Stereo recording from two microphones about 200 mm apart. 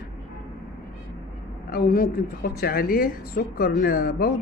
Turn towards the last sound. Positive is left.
turn(degrees=45)  # may be behind; listen again after turning